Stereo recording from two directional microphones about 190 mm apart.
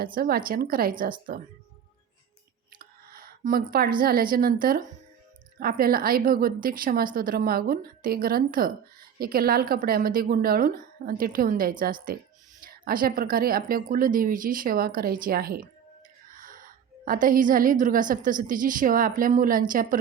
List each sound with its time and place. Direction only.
0.0 s a woman's voice: 50° right (ahead or behind)
2.7 s a woman's voice: 50° right (ahead or behind)